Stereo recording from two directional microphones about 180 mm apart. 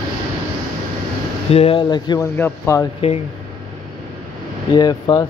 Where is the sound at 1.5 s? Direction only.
30° left (ahead or behind); by 2.9 s 15° left (ahead or behind).